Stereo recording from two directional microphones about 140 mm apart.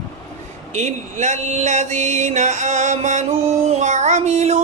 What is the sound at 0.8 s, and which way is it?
Female singing, 55° right (ahead or behind).